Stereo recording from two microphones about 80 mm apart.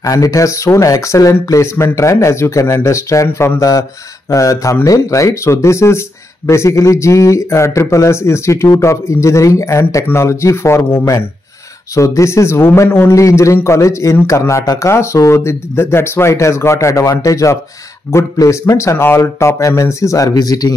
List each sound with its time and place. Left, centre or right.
0.0 s speech: left